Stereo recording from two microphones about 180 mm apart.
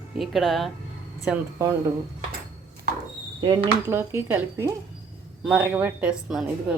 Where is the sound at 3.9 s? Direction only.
15° right (ahead or behind).